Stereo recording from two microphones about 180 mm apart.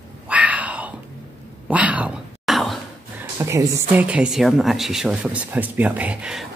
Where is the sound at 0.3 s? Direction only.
10° right (ahead or behind).